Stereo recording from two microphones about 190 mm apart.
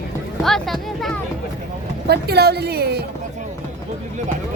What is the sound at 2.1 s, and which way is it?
Speech, 55° right (ahead or behind).